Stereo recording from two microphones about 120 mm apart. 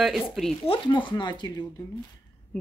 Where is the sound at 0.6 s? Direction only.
45° left (ahead or behind).